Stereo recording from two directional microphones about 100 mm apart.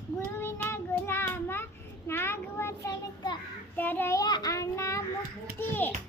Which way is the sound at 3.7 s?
20° left (ahead or behind).